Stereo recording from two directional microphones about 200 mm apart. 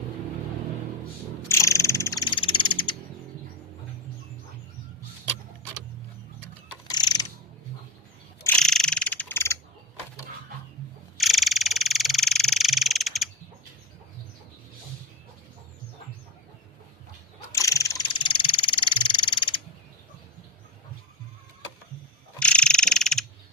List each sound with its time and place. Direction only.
1.5 s frog: 15° left (ahead or behind)
6.9 s a sound: 20° left (ahead or behind)
8.4 s frog: 5° left (ahead or behind)
11.2 s frog: centre (ahead or behind)
17.5 s frog: 15° left (ahead or behind)
22.4 s frog: 5° left (ahead or behind)